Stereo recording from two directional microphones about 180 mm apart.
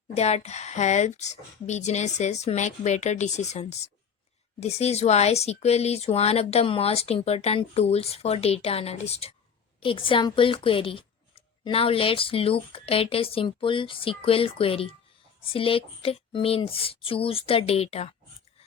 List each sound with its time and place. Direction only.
0.2 s a woman's voice: 35° left (ahead or behind)